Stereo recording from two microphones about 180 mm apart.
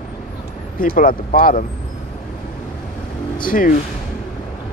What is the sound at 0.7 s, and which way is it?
Speech, 50° left (ahead or behind).